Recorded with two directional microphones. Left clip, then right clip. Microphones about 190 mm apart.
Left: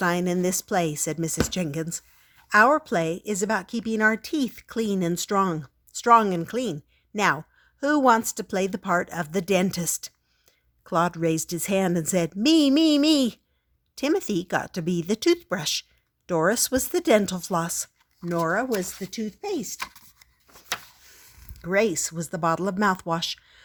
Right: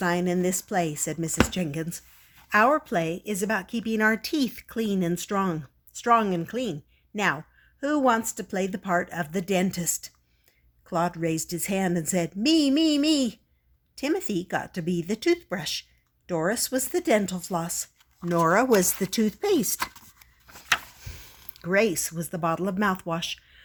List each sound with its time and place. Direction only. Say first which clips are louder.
0.0 s speech: left 1 dB; 30° left (ahead or behind); by 17.7 s 50° left (ahead or behind)
18.5 s speech: right 7 dB; 15° right (ahead or behind)
18.8 s speech: right 6 dB; 25° right (ahead or behind)
21.6 s speech: even; 20° left (ahead or behind)